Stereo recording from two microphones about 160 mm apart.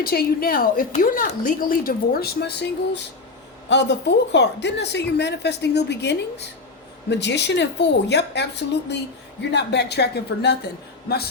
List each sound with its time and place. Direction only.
0.0 s a woman's voice: 70° left (ahead or behind); by 10.6 s 90° left
11.1 s a woman's voice: 75° left (ahead or behind)